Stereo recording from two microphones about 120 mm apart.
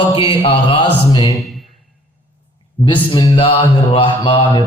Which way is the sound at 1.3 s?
Centre (ahead or behind).